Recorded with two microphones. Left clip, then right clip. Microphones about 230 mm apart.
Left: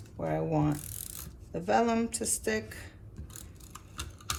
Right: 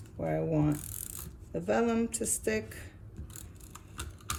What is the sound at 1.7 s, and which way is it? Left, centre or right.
Speech, centre.